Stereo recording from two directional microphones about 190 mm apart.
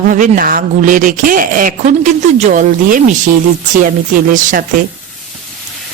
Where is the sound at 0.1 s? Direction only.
45° right (ahead or behind).